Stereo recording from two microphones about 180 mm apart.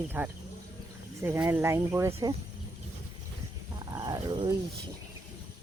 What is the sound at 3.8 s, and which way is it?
Wild animals, 20° right (ahead or behind).